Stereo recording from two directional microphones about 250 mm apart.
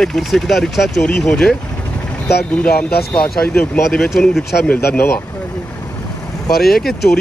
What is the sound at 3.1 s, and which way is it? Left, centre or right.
Speech, centre.